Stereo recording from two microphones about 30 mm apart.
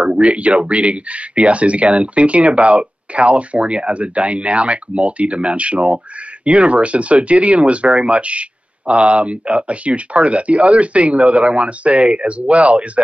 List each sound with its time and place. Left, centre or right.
0.0 s speech: right